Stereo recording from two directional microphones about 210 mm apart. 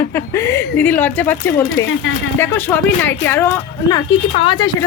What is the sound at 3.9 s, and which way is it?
Speech, 25° left (ahead or behind).